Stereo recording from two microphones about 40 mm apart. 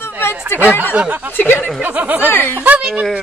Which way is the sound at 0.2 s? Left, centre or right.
Left.